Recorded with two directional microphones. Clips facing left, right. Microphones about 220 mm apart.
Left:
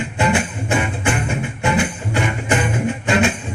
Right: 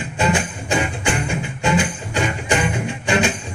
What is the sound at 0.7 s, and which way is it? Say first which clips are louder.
Music: left 1 dB; 15° right (ahead or behind).